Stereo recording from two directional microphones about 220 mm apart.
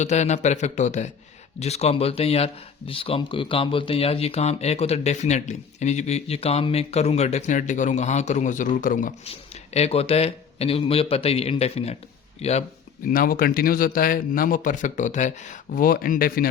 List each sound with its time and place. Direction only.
0.0 s a man's voice: 30° left (ahead or behind)
13.1 s a man's voice: 40° left (ahead or behind)